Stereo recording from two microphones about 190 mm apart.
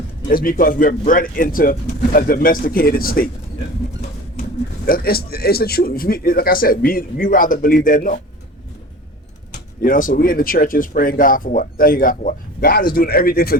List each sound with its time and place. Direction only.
0.3 s speech: 45° left (ahead or behind)
4.9 s speech: 50° left (ahead or behind)
9.8 s speech: 45° left (ahead or behind)